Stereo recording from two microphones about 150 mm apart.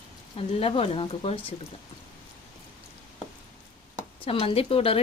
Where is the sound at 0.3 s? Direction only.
40° left (ahead or behind).